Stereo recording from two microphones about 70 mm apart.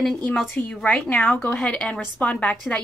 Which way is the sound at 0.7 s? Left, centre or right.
Centre.